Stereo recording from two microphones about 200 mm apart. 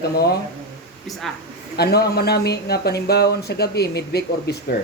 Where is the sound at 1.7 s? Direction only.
55° left (ahead or behind).